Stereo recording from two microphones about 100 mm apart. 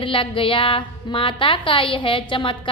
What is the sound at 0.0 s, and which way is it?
Speech, 60° left (ahead or behind).